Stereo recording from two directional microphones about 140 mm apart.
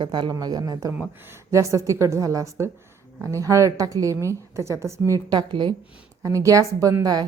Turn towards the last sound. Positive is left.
turn(degrees=-25)  # may be behind; listen again after turning